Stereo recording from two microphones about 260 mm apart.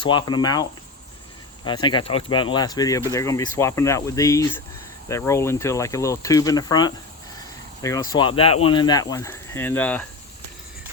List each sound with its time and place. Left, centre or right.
0.0 s speech: centre